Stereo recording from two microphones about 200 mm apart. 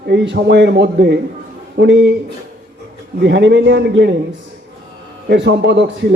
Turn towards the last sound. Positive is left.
turn(degrees=-60)  # may be behind; listen again after turning